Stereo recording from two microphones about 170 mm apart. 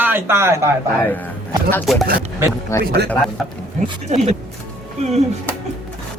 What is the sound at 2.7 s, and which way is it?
Speech, 15° left (ahead or behind).